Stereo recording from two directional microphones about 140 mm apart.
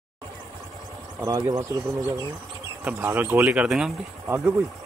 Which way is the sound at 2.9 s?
15° right (ahead or behind).